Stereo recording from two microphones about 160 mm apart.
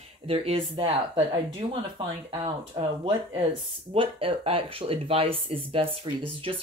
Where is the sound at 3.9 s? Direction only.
35° right (ahead or behind).